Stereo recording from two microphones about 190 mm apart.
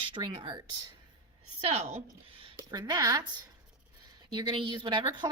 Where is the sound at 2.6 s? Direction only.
20° right (ahead or behind).